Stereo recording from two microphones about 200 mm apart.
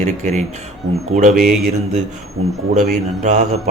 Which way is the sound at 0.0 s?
35° right (ahead or behind).